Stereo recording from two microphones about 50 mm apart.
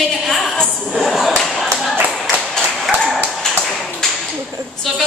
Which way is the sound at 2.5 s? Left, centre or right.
Centre.